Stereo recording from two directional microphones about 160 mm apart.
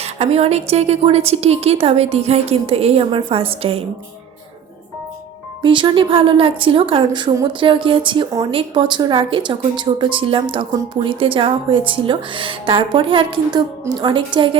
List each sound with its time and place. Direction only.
0.0 s speech: 40° right (ahead or behind)
5.6 s speech: 30° right (ahead or behind)